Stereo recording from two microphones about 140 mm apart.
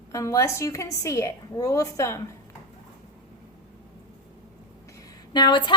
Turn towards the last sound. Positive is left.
turn(degrees=35)  # may be behind; listen again after turning